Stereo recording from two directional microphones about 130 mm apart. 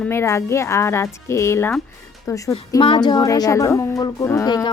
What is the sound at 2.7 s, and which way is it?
A woman's voice, 35° left (ahead or behind).